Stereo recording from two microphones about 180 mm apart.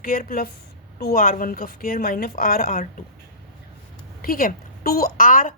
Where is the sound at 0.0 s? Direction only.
50° left (ahead or behind).